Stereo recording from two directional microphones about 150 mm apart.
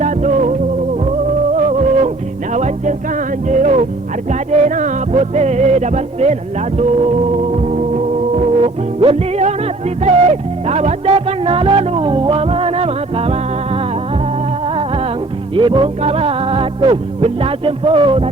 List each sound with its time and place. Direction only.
0.0 s music: 55° right (ahead or behind)
2.5 s music: 50° right (ahead or behind)
3.5 s speech: 55° right (ahead or behind)
4.3 s music: 50° right (ahead or behind)
7.5 s music: 50° right (ahead or behind)
15.5 s music: 35° right (ahead or behind)